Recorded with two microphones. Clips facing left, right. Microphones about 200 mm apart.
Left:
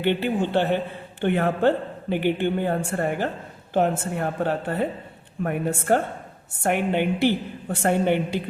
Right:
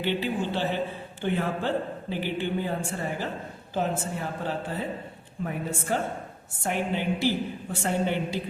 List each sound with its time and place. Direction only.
0.0 s speech: 55° left (ahead or behind)